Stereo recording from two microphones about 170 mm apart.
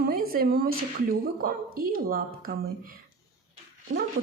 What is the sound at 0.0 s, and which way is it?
Speech, 60° right (ahead or behind).